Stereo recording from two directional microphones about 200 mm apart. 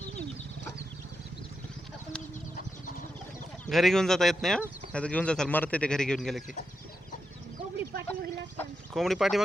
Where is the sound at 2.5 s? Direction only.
40° left (ahead or behind).